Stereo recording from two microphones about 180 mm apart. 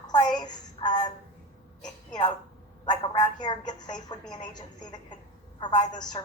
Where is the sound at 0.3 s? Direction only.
25° left (ahead or behind).